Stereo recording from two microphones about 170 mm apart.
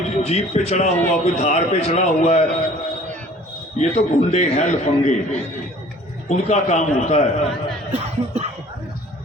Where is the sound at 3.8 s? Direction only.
40° left (ahead or behind).